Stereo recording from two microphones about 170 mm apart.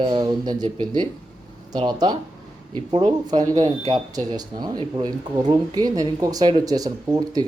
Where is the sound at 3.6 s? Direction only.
35° right (ahead or behind).